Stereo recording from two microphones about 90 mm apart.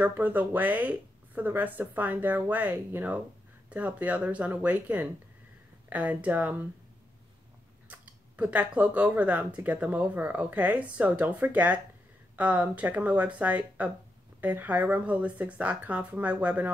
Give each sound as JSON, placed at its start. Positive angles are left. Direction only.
{"t": 0.0, "sound": "speech", "side_deg": -20}
{"t": 7.9, "sound": "speech", "side_deg": -15}